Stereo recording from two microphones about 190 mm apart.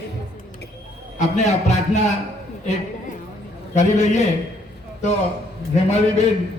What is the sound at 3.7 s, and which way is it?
Speech, 35° left (ahead or behind).